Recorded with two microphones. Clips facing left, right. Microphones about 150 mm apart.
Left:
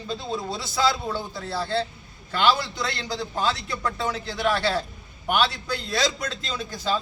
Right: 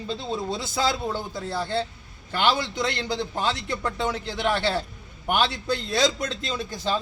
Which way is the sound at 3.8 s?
25° right (ahead or behind).